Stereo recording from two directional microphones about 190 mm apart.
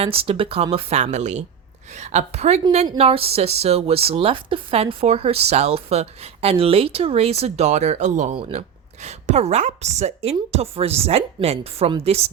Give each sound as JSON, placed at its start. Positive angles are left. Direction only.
{"t": 0.0, "sound": "speech", "side_deg": -30}
{"t": 2.8, "sound": "speech", "side_deg": -25}